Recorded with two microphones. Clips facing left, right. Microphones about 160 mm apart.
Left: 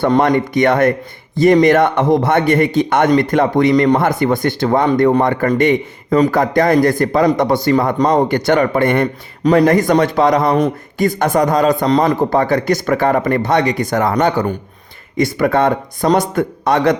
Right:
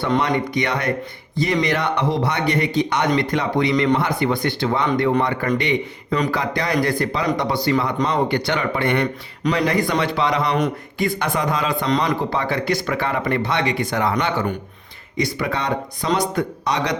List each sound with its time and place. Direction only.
0.0 s a man's voice: 50° left (ahead or behind)